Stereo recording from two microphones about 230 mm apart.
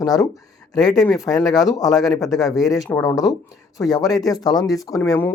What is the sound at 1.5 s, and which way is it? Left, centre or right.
Speech, centre.